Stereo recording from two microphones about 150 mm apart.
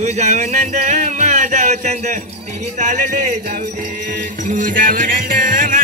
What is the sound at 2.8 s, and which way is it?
Speech, 55° right (ahead or behind).